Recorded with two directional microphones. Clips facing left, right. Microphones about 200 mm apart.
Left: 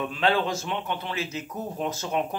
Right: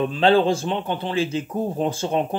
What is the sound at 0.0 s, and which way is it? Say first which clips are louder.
Speech: right 7 dB; 30° right (ahead or behind).